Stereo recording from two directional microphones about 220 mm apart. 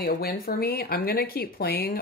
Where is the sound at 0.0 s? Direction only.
45° left (ahead or behind).